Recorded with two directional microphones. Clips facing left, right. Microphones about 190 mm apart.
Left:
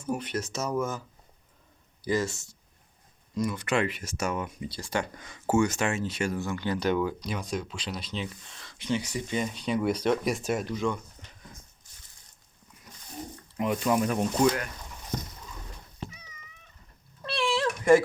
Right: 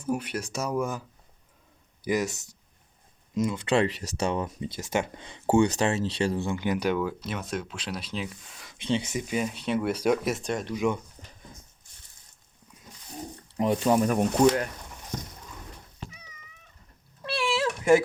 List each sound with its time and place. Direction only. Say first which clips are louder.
0.0 s speech: right 1 dB; 10° right (ahead or behind)
2.0 s speech: right 1 dB; 20° right (ahead or behind)
3.8 s speech: right 4 dB; 35° right (ahead or behind)
4.7 s speech: right 2 dB; 20° right (ahead or behind)
6.9 s speech: left 1 dB; centre (ahead or behind)
8.8 s speech: right 2 dB; 25° right (ahead or behind)
9.2 s speech: right 1 dB; 5° right (ahead or behind)
10.8 s speech: right 3 dB; 15° right (ahead or behind)
13.6 s speech: right 3 dB; 35° right (ahead or behind)
17.2 s cat: even; 5° right (ahead or behind)